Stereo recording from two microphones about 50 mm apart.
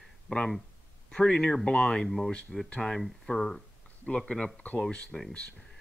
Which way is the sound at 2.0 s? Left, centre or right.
Centre.